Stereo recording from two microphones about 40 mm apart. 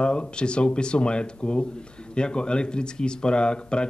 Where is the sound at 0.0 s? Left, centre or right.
Left.